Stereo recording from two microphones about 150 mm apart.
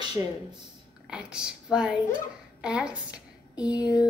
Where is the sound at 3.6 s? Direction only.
25° left (ahead or behind).